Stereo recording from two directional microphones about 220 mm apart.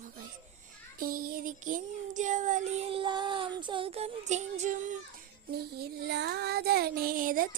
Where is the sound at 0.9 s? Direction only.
40° right (ahead or behind).